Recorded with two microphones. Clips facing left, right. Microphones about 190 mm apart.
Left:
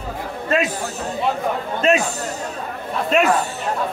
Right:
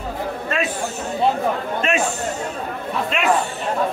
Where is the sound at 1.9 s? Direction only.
35° left (ahead or behind).